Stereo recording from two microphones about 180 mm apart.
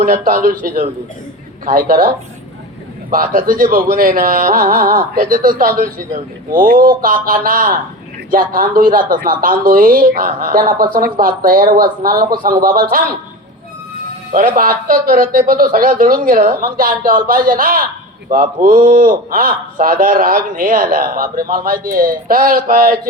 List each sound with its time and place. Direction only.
0.0 s speech: 45° right (ahead or behind)
14.3 s speech: 50° right (ahead or behind)